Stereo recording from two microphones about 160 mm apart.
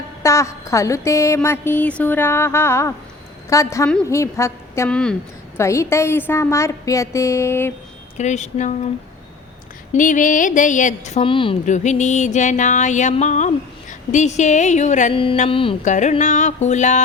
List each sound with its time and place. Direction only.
0.2 s mantra: 20° left (ahead or behind)
3.5 s a woman's voice: 20° left (ahead or behind)
4.9 s speech: 5° left (ahead or behind)
5.5 s mantra: 15° left (ahead or behind)
8.2 s music: 45° left (ahead or behind)
9.9 s music: 55° left (ahead or behind); by 11.5 s 30° left (ahead or behind)
11.6 s music: 45° left (ahead or behind)
15.1 s speech: 35° left (ahead or behind)
15.8 s music: 50° left (ahead or behind)